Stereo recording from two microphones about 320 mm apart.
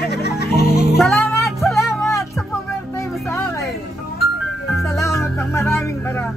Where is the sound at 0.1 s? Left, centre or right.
Left.